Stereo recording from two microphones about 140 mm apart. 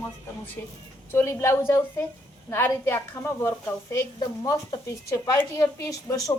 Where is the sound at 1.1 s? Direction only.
20° left (ahead or behind).